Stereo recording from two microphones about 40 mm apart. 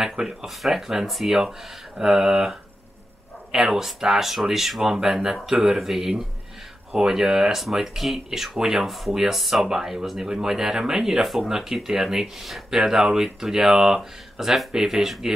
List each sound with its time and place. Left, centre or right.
0.0 s speech: centre
0.5 s speech: centre
2.0 s speech: centre
3.5 s speech: centre
8.8 s speech: centre
10.2 s speech: centre
11.2 s speech: centre
11.5 s speech: centre
12.8 s speech: centre